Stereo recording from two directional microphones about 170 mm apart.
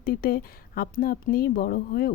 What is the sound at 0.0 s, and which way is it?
Speech, 60° left (ahead or behind).